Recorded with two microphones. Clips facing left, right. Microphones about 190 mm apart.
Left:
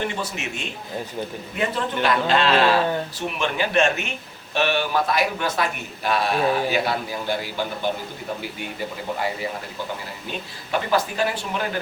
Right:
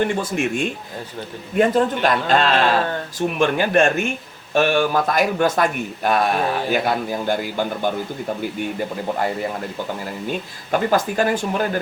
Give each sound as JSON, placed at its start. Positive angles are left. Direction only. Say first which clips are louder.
{"t": 0.1, "sound": "speech", "louder": "right 8 dB", "side_deg": -50}
{"t": 9.1, "sound": "speech", "louder": "right 3 dB", "side_deg": -50}
{"t": 10.7, "sound": "speech", "louder": "right 4 dB", "side_deg": -45}